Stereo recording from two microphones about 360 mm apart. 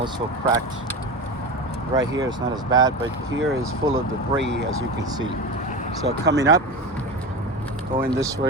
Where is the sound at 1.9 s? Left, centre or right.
Centre.